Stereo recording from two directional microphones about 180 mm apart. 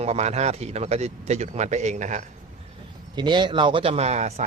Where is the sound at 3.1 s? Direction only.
25° right (ahead or behind).